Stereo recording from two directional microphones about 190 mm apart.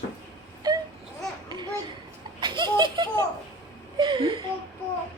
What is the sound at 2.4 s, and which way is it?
Laughter, 25° right (ahead or behind).